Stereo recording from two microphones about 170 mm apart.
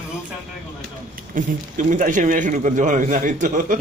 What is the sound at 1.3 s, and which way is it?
A man's voice, 50° right (ahead or behind).